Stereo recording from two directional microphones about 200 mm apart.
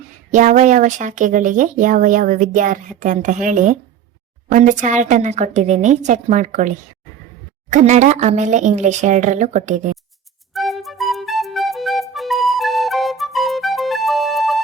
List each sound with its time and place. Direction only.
0.3 s speech: 40° right (ahead or behind)
10.5 s music: centre (ahead or behind)